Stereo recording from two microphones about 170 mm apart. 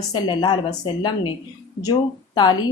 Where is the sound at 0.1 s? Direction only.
25° left (ahead or behind).